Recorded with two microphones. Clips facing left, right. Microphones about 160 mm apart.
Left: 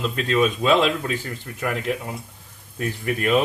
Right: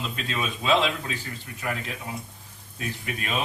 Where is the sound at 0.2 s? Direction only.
55° left (ahead or behind).